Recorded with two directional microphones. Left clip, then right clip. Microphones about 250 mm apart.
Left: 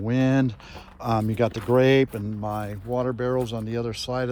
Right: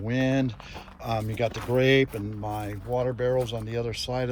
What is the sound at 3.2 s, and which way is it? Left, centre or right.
Speech, centre.